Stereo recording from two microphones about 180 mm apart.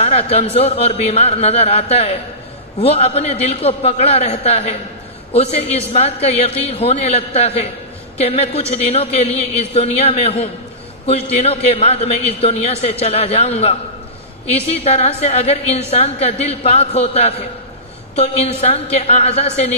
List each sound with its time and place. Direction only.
0.0 s a man's voice: 35° left (ahead or behind)